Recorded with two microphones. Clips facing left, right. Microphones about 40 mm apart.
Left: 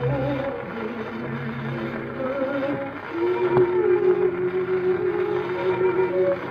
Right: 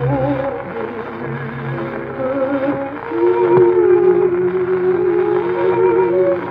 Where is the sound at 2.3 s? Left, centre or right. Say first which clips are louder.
Right 8 dB; right.